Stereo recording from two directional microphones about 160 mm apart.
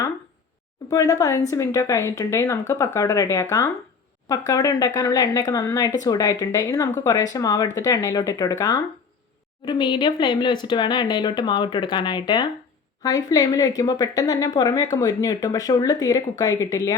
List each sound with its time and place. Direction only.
0.9 s a woman's voice: 20° left (ahead or behind)